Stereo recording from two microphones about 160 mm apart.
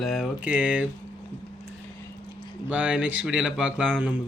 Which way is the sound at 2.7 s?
10° right (ahead or behind).